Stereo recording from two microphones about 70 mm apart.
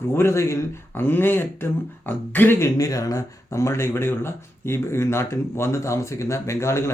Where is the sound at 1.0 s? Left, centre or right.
Left.